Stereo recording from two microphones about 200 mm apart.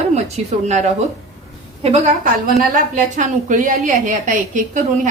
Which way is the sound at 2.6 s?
40° right (ahead or behind).